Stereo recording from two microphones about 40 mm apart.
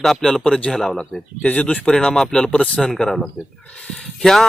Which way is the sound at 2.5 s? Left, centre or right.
Left.